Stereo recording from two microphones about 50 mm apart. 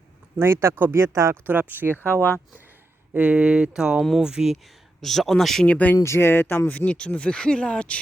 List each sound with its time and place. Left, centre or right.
0.3 s speech: right
0.9 s speech: right
1.5 s speech: right
2.0 s speech: left
3.2 s speech: right
4.9 s speech: centre
5.6 s speech: left
6.0 s speech: left
6.7 s speech: left